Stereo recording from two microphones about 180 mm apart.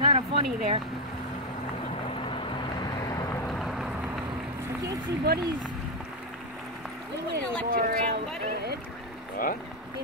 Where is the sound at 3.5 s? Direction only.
Centre (ahead or behind).